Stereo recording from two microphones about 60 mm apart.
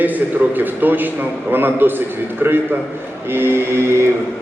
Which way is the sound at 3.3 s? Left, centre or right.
Right.